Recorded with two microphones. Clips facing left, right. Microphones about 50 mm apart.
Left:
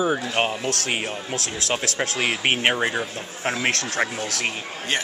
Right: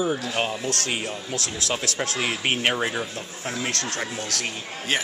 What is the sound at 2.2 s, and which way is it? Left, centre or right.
Speech, left.